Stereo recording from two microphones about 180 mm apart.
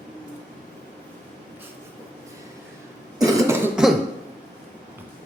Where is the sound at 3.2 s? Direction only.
15° right (ahead or behind).